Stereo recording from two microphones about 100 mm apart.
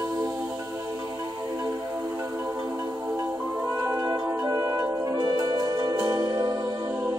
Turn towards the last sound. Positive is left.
turn(degrees=-35)  # may be behind; listen again after turning